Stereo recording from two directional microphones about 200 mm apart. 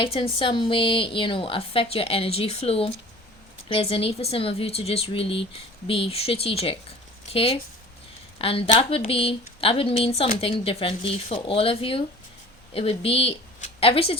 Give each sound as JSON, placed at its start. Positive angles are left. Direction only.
{"t": 0.0, "sound": "a woman's voice", "side_deg": 25}